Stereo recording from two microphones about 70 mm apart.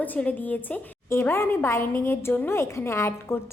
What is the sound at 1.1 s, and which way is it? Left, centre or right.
A woman's voice, left.